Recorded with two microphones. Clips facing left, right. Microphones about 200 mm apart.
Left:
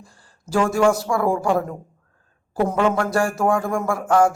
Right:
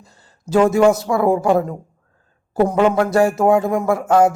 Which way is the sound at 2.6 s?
20° right (ahead or behind).